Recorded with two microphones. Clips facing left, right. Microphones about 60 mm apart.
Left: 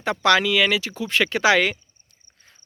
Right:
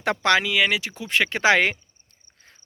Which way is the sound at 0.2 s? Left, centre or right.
Right.